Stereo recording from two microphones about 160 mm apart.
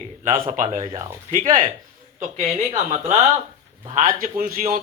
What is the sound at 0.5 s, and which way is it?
A man's voice, 50° right (ahead or behind).